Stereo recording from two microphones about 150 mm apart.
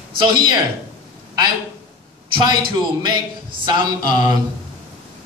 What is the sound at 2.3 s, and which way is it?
A man's voice, 30° right (ahead or behind).